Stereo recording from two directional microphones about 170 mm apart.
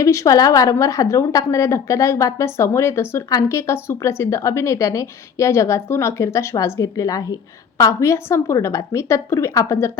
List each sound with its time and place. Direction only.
0.0 s a woman's voice: 20° left (ahead or behind)